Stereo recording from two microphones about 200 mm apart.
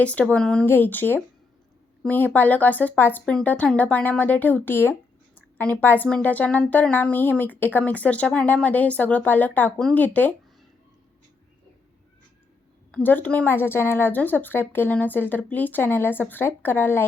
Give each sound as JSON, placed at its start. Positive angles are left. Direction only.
{"t": 0.0, "sound": "a woman's voice", "side_deg": 5}
{"t": 12.9, "sound": "a woman's voice", "side_deg": 10}